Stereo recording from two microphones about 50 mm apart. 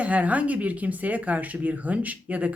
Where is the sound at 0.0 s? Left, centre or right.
Right.